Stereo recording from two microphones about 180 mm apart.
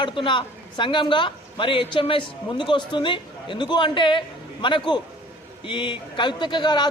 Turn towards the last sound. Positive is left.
turn(degrees=25)  # may be behind; listen again after turning